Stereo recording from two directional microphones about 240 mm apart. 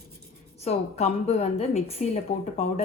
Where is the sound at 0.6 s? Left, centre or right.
Left.